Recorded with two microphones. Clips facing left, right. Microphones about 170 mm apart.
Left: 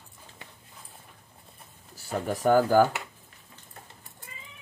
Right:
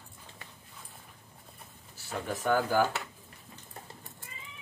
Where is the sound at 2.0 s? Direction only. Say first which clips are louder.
Left 6 dB; 40° left (ahead or behind).